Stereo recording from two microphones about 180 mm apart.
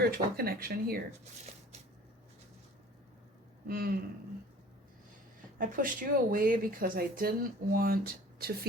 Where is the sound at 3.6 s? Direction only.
55° right (ahead or behind).